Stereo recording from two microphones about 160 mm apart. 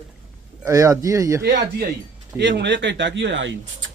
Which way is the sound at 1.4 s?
85° right.